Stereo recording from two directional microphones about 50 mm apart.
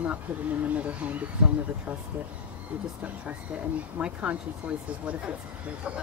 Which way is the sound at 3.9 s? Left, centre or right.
Right.